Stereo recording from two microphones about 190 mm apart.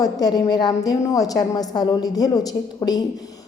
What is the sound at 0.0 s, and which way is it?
A woman's voice, 20° left (ahead or behind).